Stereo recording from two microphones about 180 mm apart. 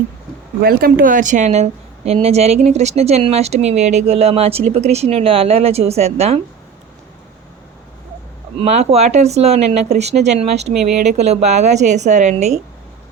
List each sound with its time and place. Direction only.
0.6 s a woman's voice: 55° right (ahead or behind); by 6.4 s 35° right (ahead or behind)
8.5 s speech: 35° right (ahead or behind)